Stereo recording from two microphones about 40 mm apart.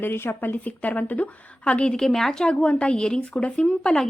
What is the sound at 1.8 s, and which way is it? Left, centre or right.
Speech, centre.